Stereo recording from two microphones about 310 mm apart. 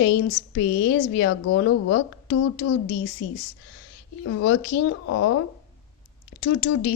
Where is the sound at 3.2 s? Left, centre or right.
Left.